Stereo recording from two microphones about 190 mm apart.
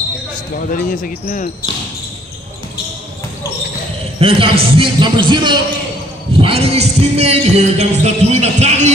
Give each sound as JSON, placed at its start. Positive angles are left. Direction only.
{"t": 0.7, "sound": "speech", "side_deg": 45}
{"t": 4.2, "sound": "speech", "side_deg": -30}
{"t": 6.4, "sound": "music", "side_deg": -30}